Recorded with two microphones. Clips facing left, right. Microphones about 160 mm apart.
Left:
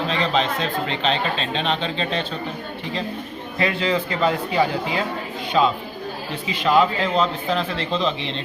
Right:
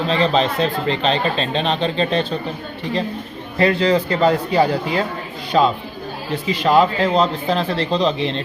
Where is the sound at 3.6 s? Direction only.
40° right (ahead or behind).